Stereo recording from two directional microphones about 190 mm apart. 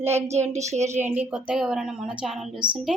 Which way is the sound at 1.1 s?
10° right (ahead or behind).